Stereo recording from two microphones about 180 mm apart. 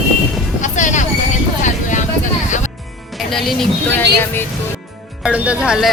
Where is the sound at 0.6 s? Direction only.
40° left (ahead or behind).